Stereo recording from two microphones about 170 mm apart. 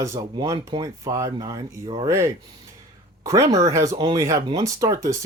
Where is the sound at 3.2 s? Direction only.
20° right (ahead or behind).